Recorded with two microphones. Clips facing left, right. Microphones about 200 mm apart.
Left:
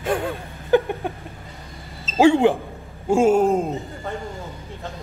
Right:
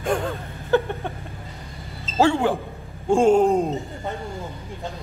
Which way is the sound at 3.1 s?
5° left (ahead or behind).